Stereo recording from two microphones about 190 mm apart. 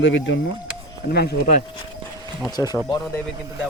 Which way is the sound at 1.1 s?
60° left (ahead or behind).